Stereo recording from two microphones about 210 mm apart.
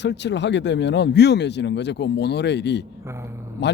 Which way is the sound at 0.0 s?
55° left (ahead or behind).